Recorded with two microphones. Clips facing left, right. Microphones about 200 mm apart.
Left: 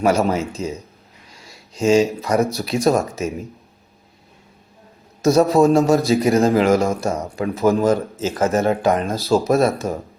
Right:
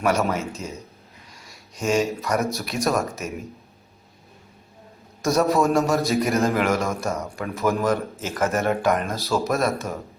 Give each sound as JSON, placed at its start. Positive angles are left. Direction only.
{"t": 0.0, "sound": "speech", "side_deg": 30}
{"t": 1.7, "sound": "a man's voice", "side_deg": 25}
{"t": 5.2, "sound": "a man's voice", "side_deg": 30}